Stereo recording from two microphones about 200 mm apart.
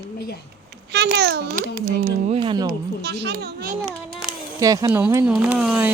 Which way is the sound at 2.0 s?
30° right (ahead or behind).